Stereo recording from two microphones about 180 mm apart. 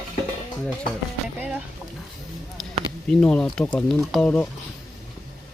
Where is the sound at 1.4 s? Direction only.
5° right (ahead or behind).